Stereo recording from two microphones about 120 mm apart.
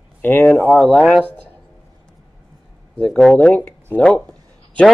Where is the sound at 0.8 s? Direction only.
5° left (ahead or behind).